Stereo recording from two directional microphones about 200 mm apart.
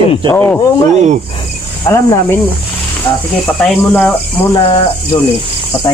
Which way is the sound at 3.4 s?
5° left (ahead or behind).